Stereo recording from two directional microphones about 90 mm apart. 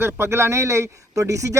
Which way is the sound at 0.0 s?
30° right (ahead or behind).